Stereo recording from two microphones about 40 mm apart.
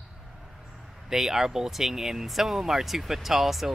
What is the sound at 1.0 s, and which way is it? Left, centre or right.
Speech, centre.